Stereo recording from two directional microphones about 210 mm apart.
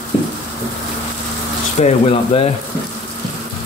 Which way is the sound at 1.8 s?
30° left (ahead or behind).